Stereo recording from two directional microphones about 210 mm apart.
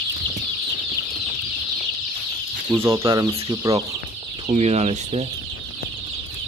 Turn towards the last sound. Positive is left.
turn(degrees=-30)  # may be behind; listen again after turning